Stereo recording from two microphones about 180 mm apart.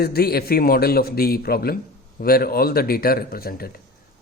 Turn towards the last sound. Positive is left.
turn(degrees=55)  # may be behind; listen again after turning